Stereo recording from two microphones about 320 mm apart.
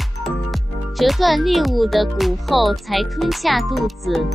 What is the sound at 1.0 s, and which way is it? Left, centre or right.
A child's voice, centre.